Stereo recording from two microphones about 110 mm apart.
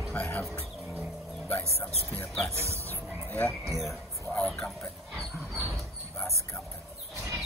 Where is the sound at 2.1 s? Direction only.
10° left (ahead or behind).